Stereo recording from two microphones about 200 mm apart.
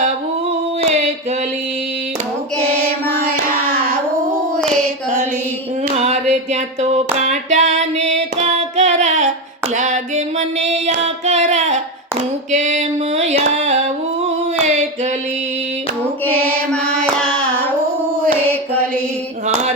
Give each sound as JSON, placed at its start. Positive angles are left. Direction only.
{"t": 6.0, "sound": "a sound", "side_deg": -35}
{"t": 9.7, "sound": "music", "side_deg": -35}
{"t": 12.5, "sound": "a sound", "side_deg": -35}
{"t": 13.5, "sound": "music", "side_deg": -35}
{"t": 14.3, "sound": "singing", "side_deg": -35}
{"t": 16.7, "sound": "mantra", "side_deg": 5}